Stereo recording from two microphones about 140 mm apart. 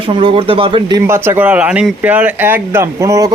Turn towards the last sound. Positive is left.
turn(degrees=-25)  # may be behind; listen again after turning